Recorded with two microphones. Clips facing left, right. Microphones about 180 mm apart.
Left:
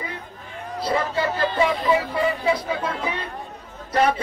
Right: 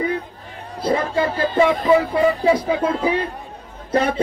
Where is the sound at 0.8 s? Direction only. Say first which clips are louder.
Right 4 dB; 50° right (ahead or behind).